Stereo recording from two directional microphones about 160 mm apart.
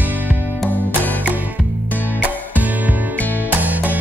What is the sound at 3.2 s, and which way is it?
Music, 10° left (ahead or behind).